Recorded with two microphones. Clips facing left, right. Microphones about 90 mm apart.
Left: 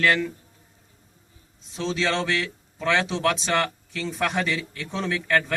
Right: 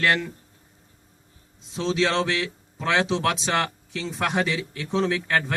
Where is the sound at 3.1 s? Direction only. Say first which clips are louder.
Even; 25° right (ahead or behind).